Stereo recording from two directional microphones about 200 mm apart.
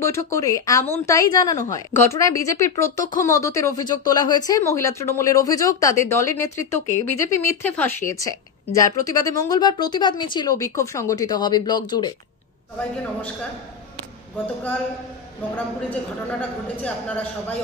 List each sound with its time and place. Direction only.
0.0 s a woman's voice: 15° left (ahead or behind)
12.7 s a woman's voice: 5° left (ahead or behind)